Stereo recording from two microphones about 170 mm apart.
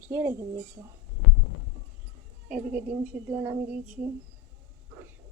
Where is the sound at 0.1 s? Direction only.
15° right (ahead or behind).